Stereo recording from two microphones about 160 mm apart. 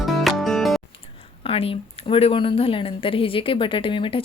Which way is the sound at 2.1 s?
35° left (ahead or behind).